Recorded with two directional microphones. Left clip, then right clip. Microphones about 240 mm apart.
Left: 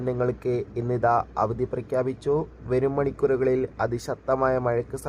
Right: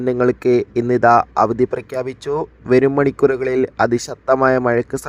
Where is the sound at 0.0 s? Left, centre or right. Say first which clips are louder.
Right 10 dB; right.